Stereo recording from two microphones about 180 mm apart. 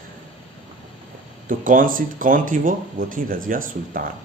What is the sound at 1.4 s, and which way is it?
A man's voice, 45° right (ahead or behind).